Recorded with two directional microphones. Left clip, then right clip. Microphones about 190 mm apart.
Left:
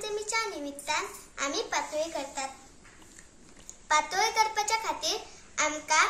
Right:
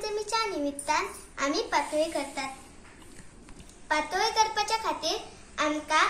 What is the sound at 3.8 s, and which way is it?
A child's voice, 20° left (ahead or behind).